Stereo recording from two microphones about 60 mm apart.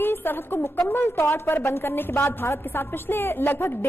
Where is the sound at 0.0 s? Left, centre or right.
Left.